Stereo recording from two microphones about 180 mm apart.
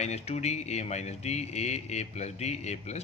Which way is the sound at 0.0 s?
40° left (ahead or behind).